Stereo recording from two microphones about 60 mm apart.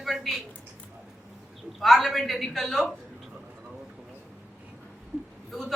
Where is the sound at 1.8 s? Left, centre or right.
Centre.